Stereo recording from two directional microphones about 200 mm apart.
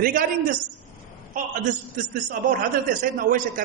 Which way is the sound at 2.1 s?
45° right (ahead or behind).